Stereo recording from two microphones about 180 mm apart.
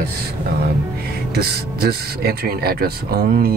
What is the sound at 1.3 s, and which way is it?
Speech, 60° right (ahead or behind).